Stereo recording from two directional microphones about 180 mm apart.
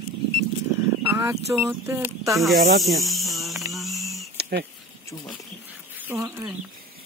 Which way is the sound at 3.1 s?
Centre (ahead or behind).